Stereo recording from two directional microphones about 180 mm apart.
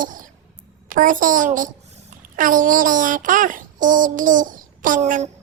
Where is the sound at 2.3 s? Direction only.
45° right (ahead or behind).